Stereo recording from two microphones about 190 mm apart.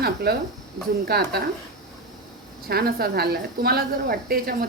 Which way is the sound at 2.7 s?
55° right (ahead or behind).